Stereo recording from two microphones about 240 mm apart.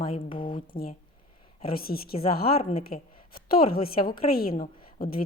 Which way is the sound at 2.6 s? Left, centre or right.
Left.